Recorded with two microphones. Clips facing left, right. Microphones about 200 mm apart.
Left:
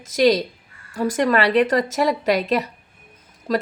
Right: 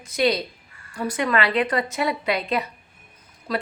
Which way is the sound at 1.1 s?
40° left (ahead or behind).